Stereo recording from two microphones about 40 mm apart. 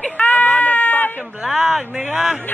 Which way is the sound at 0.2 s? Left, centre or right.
Left.